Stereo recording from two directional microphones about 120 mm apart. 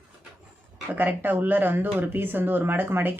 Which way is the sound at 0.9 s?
15° right (ahead or behind).